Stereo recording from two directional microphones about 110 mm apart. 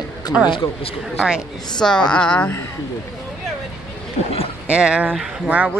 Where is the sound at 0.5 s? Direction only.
50° left (ahead or behind).